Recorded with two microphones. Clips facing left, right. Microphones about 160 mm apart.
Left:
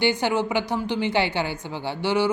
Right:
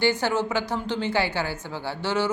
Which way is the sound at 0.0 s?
15° left (ahead or behind).